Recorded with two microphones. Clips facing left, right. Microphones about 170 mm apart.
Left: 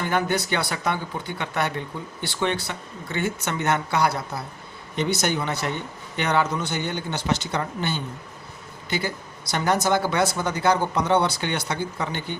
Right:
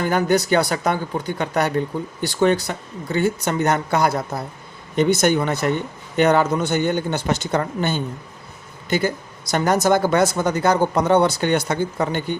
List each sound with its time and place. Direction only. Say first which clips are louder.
0.0 s speech: right 5 dB; 40° right (ahead or behind)